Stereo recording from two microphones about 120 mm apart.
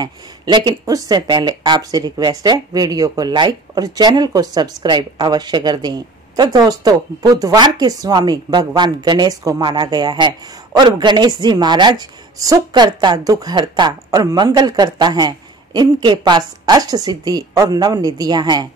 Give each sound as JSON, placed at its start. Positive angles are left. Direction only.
{"t": 0.0, "sound": "speech", "side_deg": -40}